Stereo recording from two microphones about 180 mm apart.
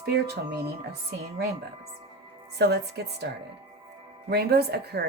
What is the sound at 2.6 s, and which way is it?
Speech, 65° right (ahead or behind).